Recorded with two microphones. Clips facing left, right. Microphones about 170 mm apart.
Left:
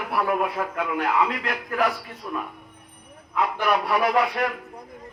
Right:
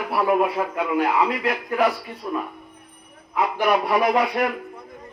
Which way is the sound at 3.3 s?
15° right (ahead or behind).